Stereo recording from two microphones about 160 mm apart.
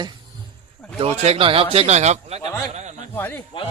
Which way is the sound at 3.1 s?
15° left (ahead or behind).